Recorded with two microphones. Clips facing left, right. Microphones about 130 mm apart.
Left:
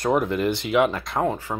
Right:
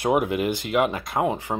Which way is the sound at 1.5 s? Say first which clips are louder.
Right 2 dB; 30° right (ahead or behind).